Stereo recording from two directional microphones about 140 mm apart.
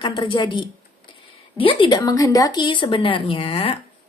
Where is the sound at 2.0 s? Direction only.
25° left (ahead or behind).